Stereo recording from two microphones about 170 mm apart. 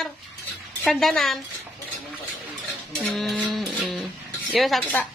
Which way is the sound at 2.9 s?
Centre (ahead or behind).